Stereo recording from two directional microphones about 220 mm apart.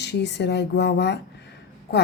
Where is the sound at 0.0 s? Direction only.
50° left (ahead or behind).